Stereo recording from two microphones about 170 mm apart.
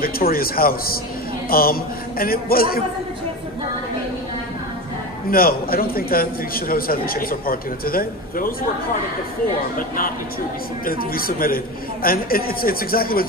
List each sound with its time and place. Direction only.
0.0 s a man's voice: 60° left (ahead or behind)
5.3 s a man's voice: 60° left (ahead or behind)
9.8 s a man's voice: 55° left (ahead or behind)